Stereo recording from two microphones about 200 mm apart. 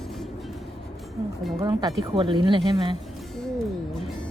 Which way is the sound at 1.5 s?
20° right (ahead or behind).